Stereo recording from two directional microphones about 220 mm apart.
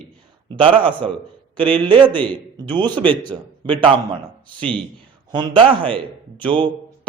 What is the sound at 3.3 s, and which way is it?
Speech, 10° right (ahead or behind).